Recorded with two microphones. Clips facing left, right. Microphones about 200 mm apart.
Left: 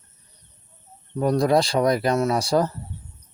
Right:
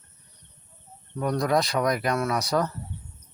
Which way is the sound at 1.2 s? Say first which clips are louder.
Left 5 dB; 30° left (ahead or behind).